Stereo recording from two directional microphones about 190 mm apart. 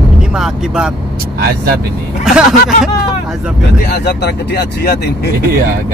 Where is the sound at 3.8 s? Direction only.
60° left (ahead or behind).